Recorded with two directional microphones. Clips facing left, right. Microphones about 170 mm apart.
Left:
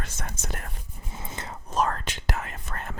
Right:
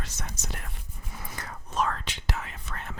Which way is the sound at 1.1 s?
25° left (ahead or behind).